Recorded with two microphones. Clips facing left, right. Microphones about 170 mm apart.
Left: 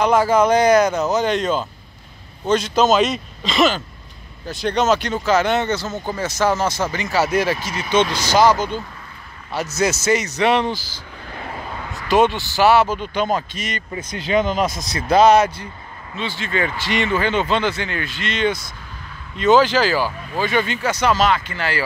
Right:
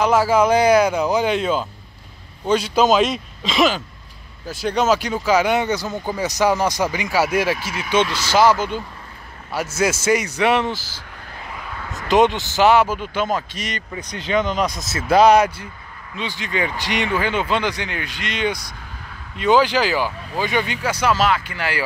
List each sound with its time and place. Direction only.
0.0 s speech: 5° right (ahead or behind)
11.4 s a sound: 35° left (ahead or behind)
11.9 s speech: 20° right (ahead or behind)